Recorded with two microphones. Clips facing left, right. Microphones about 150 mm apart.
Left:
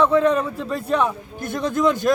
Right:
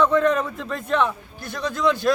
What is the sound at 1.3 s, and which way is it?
Speech, 50° left (ahead or behind).